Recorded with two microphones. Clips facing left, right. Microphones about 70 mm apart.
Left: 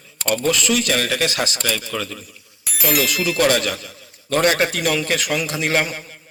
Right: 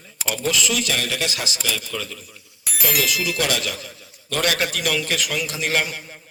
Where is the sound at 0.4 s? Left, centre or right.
Left.